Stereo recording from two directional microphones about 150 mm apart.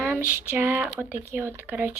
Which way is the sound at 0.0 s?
15° right (ahead or behind).